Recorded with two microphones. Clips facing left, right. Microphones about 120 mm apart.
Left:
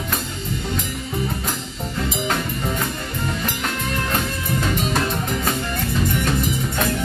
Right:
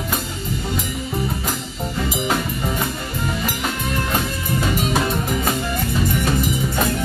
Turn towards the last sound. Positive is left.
turn(degrees=-5)  # may be behind; listen again after turning